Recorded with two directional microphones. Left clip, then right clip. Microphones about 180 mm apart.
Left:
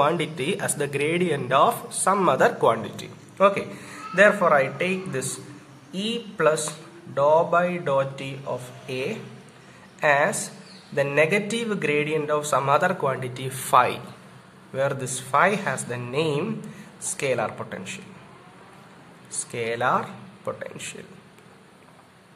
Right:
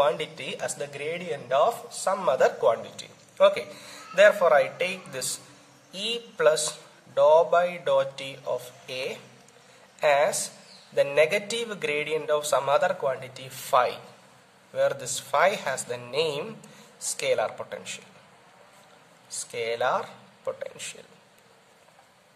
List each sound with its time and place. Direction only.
0.0 s speech: 30° right (ahead or behind)
3.0 s a man's voice: 35° right (ahead or behind)
19.5 s speech: 35° right (ahead or behind)